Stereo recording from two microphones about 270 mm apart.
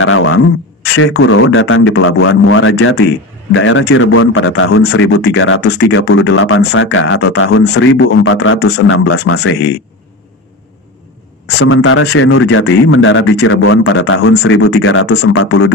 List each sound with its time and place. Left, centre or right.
0.0 s a sound: left
0.8 s speech: left
11.4 s speech: left